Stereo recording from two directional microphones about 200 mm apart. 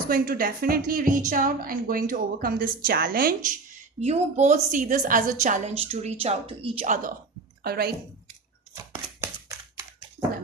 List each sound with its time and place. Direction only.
0.1 s a woman's voice: 45° right (ahead or behind)
4.0 s a woman's voice: 35° right (ahead or behind)
7.6 s a woman's voice: 50° right (ahead or behind)
9.2 s a sound: 10° right (ahead or behind)